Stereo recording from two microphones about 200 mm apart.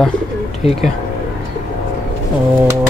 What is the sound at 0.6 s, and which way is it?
Speech, 30° left (ahead or behind).